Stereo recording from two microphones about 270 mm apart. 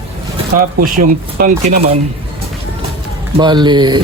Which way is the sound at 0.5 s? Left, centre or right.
Right.